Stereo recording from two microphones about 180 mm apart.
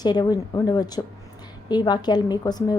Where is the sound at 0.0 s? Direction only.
25° left (ahead or behind).